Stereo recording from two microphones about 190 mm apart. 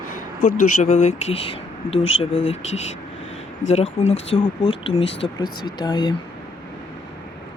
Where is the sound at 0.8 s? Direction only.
35° left (ahead or behind).